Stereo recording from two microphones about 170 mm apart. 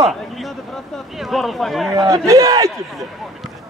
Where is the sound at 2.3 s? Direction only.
20° right (ahead or behind).